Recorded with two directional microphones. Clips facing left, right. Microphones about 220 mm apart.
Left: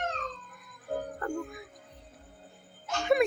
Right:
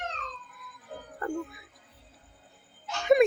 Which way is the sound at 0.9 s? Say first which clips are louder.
Left 10 dB; 50° left (ahead or behind).